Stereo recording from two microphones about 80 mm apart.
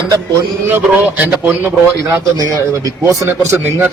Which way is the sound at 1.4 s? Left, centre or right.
Right.